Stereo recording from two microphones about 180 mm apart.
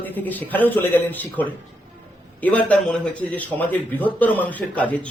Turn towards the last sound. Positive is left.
turn(degrees=10)  # may be behind; listen again after turning